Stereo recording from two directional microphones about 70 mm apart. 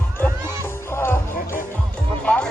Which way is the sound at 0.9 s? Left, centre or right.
Left.